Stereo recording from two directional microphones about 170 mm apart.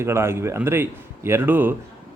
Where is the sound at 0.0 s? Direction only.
15° right (ahead or behind).